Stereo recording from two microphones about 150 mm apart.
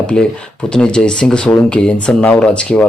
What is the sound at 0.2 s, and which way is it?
A man's voice, 5° left (ahead or behind).